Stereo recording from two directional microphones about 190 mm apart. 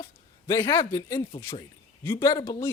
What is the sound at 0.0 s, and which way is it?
Speech, 20° left (ahead or behind).